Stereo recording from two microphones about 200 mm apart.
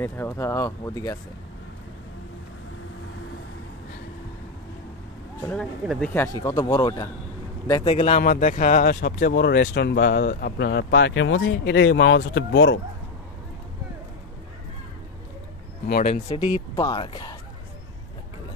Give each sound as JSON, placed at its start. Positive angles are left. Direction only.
{"t": 0.0, "sound": "speech", "side_deg": 10}
{"t": 5.4, "sound": "speech", "side_deg": 5}
{"t": 7.9, "sound": "speech", "side_deg": 35}
{"t": 9.0, "sound": "speech", "side_deg": 55}
{"t": 16.0, "sound": "speech", "side_deg": 35}